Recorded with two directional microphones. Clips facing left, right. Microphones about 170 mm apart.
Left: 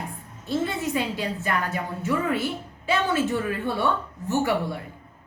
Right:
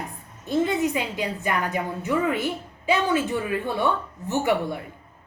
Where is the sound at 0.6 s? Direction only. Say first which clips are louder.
Right 5 dB; 15° right (ahead or behind).